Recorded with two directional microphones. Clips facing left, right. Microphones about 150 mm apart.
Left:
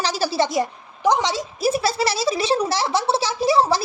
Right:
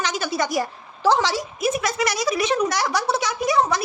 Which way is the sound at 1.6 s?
30° left (ahead or behind).